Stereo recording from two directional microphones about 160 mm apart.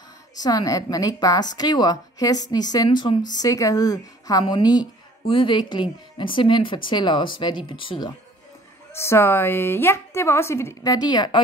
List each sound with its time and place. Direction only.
0.4 s a woman's voice: 25° left (ahead or behind)
8.9 s a woman's voice: 15° left (ahead or behind)